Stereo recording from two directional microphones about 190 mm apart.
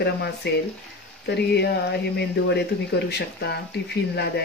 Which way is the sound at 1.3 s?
60° left (ahead or behind).